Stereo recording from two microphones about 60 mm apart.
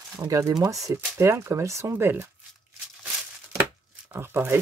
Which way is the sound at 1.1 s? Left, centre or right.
Right.